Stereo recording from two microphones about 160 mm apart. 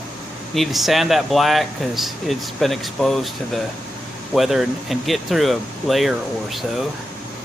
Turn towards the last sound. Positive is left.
turn(degrees=0)  # may be behind; listen again after turning